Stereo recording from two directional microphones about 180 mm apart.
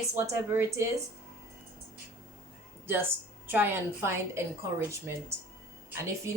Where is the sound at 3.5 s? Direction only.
10° right (ahead or behind).